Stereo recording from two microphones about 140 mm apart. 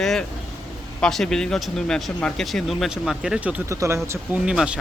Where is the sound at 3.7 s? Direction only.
20° right (ahead or behind).